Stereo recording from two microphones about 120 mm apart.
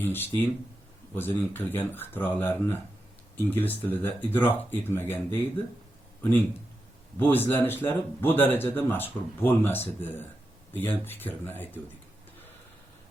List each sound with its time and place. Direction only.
0.0 s speech: 15° left (ahead or behind)
7.2 s speech: 15° left (ahead or behind)